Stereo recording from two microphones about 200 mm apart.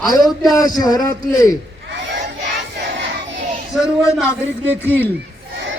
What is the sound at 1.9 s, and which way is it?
Crowd, 60° right (ahead or behind).